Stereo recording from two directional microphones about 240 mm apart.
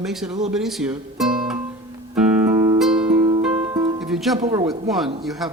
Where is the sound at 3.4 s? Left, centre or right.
Centre.